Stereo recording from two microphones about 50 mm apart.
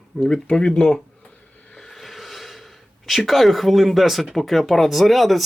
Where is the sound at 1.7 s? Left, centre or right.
Centre.